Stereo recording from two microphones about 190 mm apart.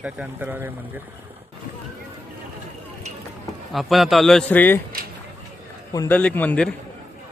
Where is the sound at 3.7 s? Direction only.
Centre (ahead or behind).